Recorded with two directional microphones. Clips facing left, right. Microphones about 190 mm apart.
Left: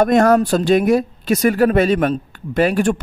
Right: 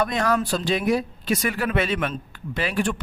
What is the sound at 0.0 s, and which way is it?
Speech, 45° left (ahead or behind).